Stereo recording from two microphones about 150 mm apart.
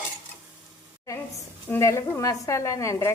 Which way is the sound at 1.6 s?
15° left (ahead or behind).